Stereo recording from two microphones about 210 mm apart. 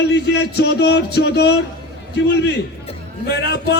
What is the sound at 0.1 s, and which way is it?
Speech, 50° left (ahead or behind).